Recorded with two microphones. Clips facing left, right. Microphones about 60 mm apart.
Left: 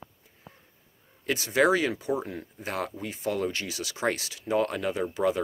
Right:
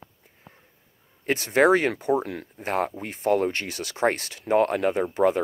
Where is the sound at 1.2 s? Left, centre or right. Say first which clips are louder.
Right 4 dB; right.